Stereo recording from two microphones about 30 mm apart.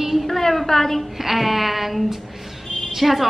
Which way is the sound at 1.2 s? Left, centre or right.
Centre.